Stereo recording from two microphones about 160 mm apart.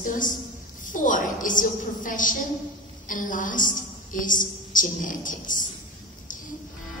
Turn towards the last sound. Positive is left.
turn(degrees=55)  # may be behind; listen again after turning